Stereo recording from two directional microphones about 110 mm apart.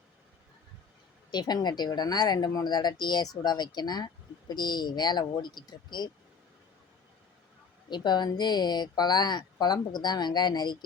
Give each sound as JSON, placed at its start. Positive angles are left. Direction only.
{"t": 1.3, "sound": "a woman's voice", "side_deg": 40}
{"t": 7.9, "sound": "a woman's voice", "side_deg": 40}